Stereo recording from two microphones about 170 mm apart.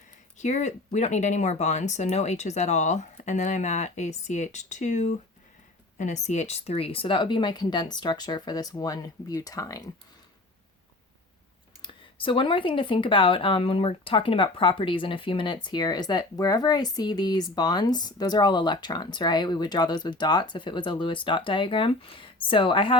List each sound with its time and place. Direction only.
0.3 s speech: 45° left (ahead or behind); by 9.8 s 20° left (ahead or behind)
11.8 s speech: 30° left (ahead or behind)